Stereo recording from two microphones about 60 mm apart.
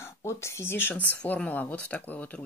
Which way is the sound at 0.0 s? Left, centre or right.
Left.